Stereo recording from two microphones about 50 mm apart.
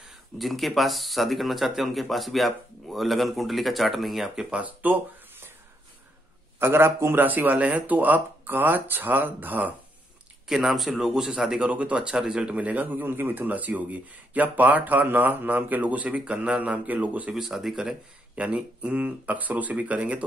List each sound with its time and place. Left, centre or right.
0.4 s speech: centre
4.5 s speech: right
6.6 s a man's voice: right
7.2 s speech: right
10.5 s speech: centre
11.7 s speech: right
12.1 s speech: centre
12.4 s speech: right
17.3 s speech: centre
18.3 s speech: right